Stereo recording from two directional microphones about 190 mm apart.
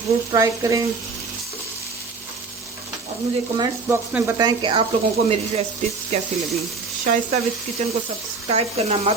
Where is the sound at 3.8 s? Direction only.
10° right (ahead or behind).